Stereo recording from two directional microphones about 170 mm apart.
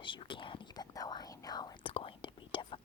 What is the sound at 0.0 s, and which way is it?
Whispering, 30° left (ahead or behind).